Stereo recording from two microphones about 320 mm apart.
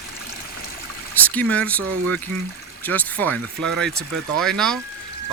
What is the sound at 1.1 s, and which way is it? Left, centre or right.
Speech, centre.